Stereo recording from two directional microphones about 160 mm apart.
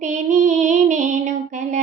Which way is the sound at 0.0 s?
50° right (ahead or behind).